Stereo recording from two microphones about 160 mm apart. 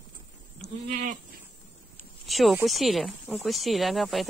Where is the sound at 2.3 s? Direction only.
Centre (ahead or behind).